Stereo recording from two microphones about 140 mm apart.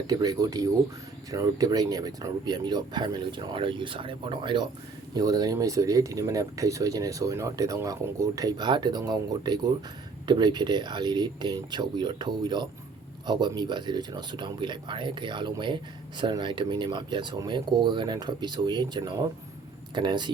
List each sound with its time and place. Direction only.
0.1 s speech: 30° right (ahead or behind)